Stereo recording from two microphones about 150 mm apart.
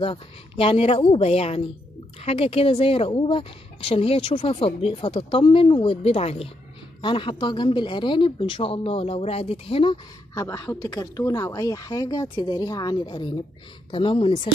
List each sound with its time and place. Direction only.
0.0 s a woman's voice: 35° left (ahead or behind)
10.3 s a woman's voice: 25° left (ahead or behind)